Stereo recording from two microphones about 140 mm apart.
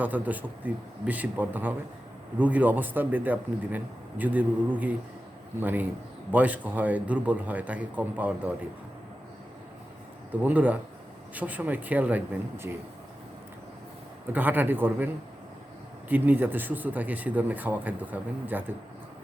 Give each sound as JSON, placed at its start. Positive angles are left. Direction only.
{"t": 0.0, "sound": "speech", "side_deg": -10}
{"t": 10.4, "sound": "speech", "side_deg": -10}
{"t": 14.3, "sound": "speech", "side_deg": -15}